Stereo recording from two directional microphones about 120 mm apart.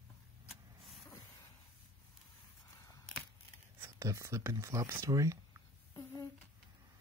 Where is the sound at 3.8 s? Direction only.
25° right (ahead or behind).